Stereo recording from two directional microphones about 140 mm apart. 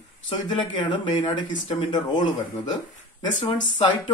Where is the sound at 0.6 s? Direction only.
30° left (ahead or behind).